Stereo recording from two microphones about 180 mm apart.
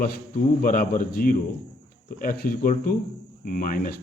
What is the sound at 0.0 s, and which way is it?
Speech, 50° left (ahead or behind).